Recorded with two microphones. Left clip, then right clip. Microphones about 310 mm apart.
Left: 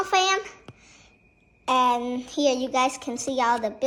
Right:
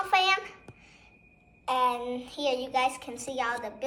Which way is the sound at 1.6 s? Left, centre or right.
Left.